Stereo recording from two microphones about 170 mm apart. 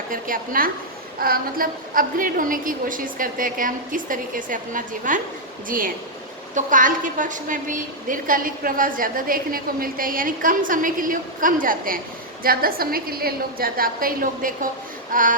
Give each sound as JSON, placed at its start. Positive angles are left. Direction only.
{"t": 0.1, "sound": "a woman's voice", "side_deg": -55}